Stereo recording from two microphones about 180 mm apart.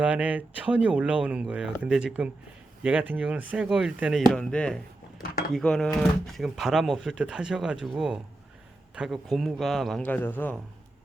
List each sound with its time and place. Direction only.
0.0 s speech: 10° right (ahead or behind)
5.2 s speech: 55° left (ahead or behind)
5.5 s speech: 5° left (ahead or behind)